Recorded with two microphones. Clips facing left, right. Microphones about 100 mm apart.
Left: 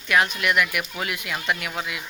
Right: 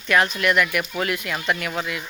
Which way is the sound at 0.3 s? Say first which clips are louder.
Right 3 dB; 10° left (ahead or behind).